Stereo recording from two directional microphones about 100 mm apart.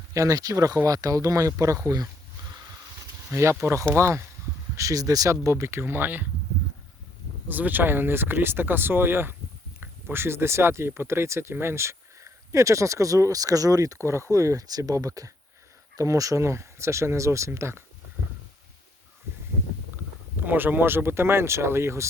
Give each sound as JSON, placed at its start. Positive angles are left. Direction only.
{"t": 0.1, "sound": "speech", "side_deg": -35}
{"t": 3.3, "sound": "speech", "side_deg": -25}
{"t": 7.4, "sound": "speech", "side_deg": -15}
{"t": 20.4, "sound": "speech", "side_deg": -20}